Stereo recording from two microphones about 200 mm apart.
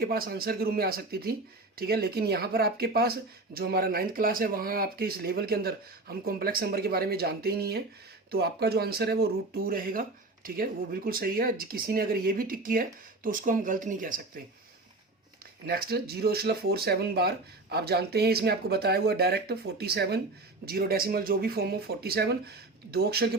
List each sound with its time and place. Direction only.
0.0 s speech: 50° right (ahead or behind)
15.6 s speech: 50° right (ahead or behind)